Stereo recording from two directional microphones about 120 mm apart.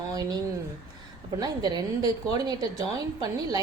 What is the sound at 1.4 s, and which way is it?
A woman's voice, 35° right (ahead or behind).